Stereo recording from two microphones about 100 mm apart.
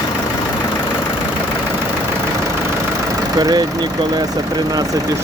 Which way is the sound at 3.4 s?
40° right (ahead or behind).